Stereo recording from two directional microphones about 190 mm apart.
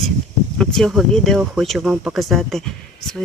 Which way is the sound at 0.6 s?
Centre (ahead or behind).